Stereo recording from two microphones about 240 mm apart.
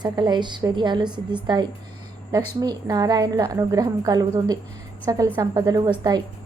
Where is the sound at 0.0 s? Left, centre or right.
Centre.